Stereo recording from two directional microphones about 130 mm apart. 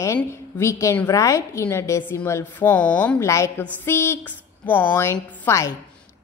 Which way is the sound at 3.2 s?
20° left (ahead or behind).